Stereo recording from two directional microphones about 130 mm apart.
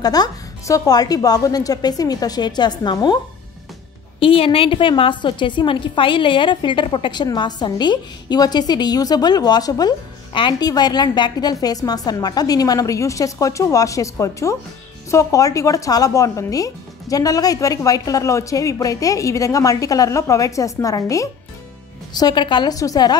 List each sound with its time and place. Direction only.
0.0 s speech: 30° left (ahead or behind)
4.2 s a woman's voice: 45° left (ahead or behind); by 23.1 s 30° left (ahead or behind)